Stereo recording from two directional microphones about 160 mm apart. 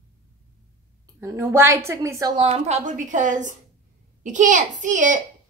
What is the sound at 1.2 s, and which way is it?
A woman's voice, 15° right (ahead or behind).